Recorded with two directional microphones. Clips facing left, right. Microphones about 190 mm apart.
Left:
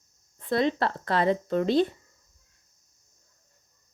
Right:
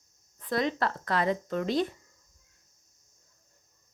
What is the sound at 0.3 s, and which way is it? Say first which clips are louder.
Speech: left 4 dB; 25° left (ahead or behind).